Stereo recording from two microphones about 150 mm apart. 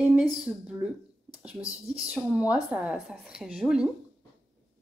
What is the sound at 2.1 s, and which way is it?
Speech, 10° right (ahead or behind).